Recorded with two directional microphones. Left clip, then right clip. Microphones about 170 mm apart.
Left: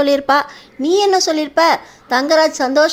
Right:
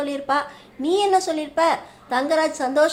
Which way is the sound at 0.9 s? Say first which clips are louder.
Left 5 dB; 30° left (ahead or behind).